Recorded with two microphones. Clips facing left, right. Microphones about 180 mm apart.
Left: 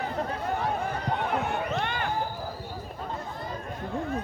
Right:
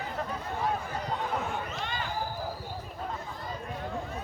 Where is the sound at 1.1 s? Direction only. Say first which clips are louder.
Left 3 dB; 65° left (ahead or behind).